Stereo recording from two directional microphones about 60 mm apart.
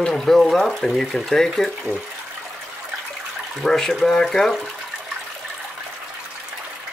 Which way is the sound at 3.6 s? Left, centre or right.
Centre.